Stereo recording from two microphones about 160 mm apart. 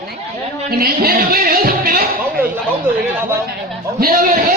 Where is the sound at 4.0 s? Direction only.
60° right (ahead or behind).